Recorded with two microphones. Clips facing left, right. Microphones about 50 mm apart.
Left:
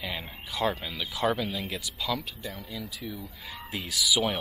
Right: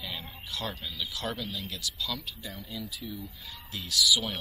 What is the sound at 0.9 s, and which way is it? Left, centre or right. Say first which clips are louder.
Speech: left 7 dB; centre.